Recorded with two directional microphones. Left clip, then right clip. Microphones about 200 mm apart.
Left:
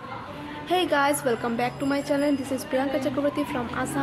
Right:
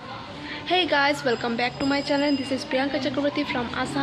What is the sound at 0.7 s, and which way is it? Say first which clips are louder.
Speech: right 1 dB; centre (ahead or behind).